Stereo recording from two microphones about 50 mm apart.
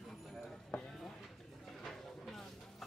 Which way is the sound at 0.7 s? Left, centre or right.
Left.